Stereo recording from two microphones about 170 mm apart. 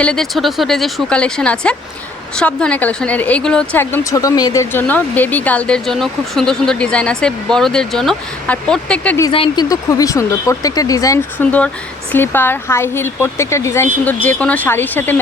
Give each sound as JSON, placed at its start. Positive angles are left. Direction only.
{"t": 0.0, "sound": "a woman's voice", "side_deg": 5}
{"t": 9.3, "sound": "speech", "side_deg": 30}
{"t": 9.6, "sound": "speech", "side_deg": 20}
{"t": 11.3, "sound": "a woman's voice", "side_deg": 10}